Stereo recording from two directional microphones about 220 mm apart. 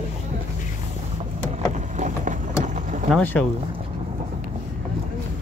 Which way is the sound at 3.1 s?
5° left (ahead or behind).